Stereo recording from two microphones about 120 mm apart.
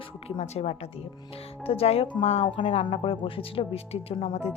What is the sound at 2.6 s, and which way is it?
Speech, 50° left (ahead or behind).